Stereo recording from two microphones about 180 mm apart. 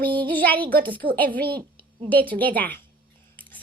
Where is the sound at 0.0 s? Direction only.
10° left (ahead or behind).